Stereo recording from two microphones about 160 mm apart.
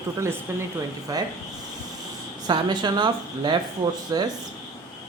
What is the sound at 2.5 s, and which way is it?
A woman's voice, 25° right (ahead or behind).